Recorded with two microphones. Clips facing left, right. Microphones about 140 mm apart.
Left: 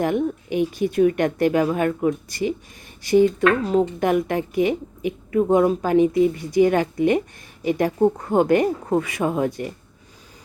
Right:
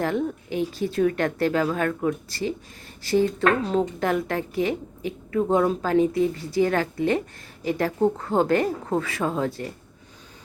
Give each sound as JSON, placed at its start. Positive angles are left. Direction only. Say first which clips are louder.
{"t": 0.0, "sound": "a woman's voice", "louder": "left 3 dB", "side_deg": 15}